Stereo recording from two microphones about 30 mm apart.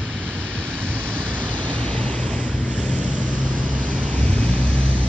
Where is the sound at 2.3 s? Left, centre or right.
Left.